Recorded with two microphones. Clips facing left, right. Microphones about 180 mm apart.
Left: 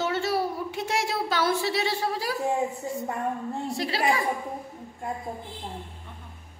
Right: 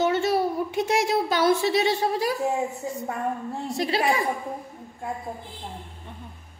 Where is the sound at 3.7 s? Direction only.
20° right (ahead or behind).